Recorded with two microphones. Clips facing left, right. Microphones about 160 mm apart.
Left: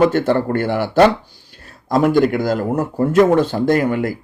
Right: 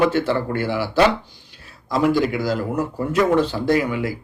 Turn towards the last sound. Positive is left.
turn(degrees=50)  # may be behind; listen again after turning